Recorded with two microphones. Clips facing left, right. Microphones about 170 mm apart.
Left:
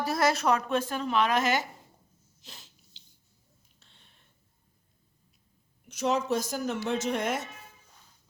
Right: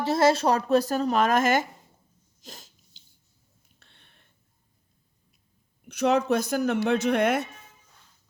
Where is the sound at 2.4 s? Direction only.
45° right (ahead or behind).